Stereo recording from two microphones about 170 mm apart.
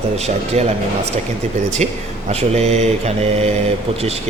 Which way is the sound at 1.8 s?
40° right (ahead or behind).